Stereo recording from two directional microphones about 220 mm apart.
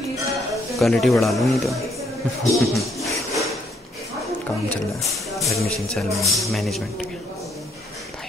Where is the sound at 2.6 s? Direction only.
Centre (ahead or behind).